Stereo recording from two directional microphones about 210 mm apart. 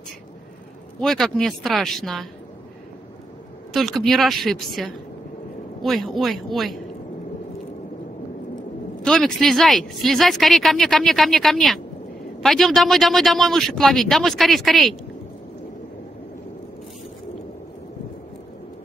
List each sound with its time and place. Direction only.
1.0 s speech: centre (ahead or behind)
3.7 s speech: centre (ahead or behind)
9.0 s speech: centre (ahead or behind)